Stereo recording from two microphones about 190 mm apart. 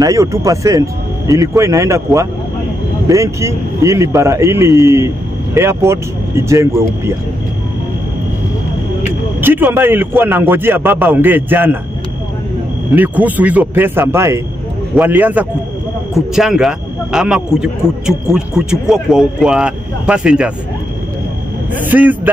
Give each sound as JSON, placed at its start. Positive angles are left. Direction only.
{"t": 0.0, "sound": "speech", "side_deg": -15}
{"t": 9.4, "sound": "speech", "side_deg": -10}
{"t": 12.9, "sound": "speech", "side_deg": -10}
{"t": 21.7, "sound": "speech", "side_deg": -10}